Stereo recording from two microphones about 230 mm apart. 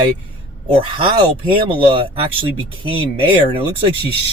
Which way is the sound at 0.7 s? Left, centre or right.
Right.